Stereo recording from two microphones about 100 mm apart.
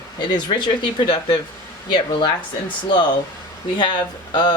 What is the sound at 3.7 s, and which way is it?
Speech, 50° left (ahead or behind).